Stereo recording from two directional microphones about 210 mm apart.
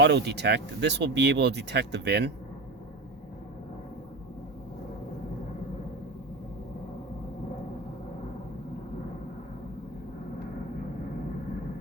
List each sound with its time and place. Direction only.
0.0 s speech: 55° right (ahead or behind)